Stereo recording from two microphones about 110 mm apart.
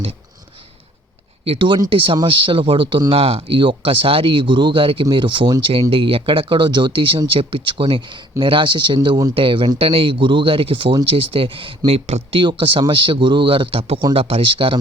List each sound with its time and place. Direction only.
1.5 s speech: 50° right (ahead or behind)
3.1 s speech: 65° right (ahead or behind); by 9.0 s 45° right (ahead or behind)
9.0 s speech: 35° right (ahead or behind)
9.3 s speech: 50° right (ahead or behind)
11.9 s speech: 65° right (ahead or behind)
12.4 s speech: 50° right (ahead or behind)